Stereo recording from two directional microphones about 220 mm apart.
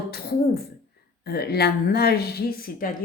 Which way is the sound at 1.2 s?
45° left (ahead or behind).